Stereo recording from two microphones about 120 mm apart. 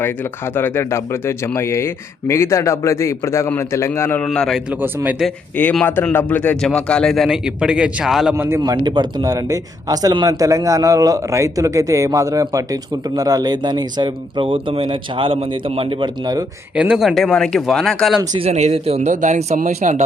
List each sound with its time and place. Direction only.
0.5 s speech: 20° left (ahead or behind)
4.3 s a man's voice: centre (ahead or behind)
5.8 s a man's voice: 15° left (ahead or behind); by 8.4 s centre (ahead or behind)
8.4 s a man's voice: 20° right (ahead or behind); by 16.0 s 50° right (ahead or behind)
16.7 s a man's voice: 10° right (ahead or behind)
18.3 s speech: 65° right (ahead or behind); by 20.0 s 90° right